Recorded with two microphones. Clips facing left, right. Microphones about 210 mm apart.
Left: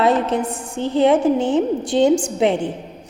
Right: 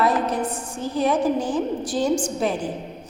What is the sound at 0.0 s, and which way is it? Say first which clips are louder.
A woman's voice: left 4 dB; 25° left (ahead or behind).